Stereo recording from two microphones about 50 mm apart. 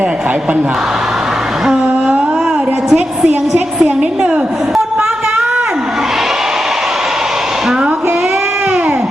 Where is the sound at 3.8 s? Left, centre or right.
Right.